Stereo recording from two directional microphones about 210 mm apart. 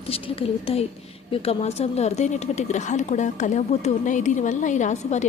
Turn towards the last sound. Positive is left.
turn(degrees=35)  # may be behind; listen again after turning